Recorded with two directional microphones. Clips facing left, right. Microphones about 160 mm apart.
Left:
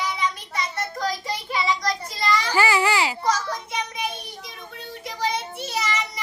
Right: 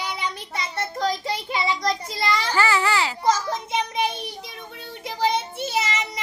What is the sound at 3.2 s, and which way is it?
Children playing, 20° right (ahead or behind).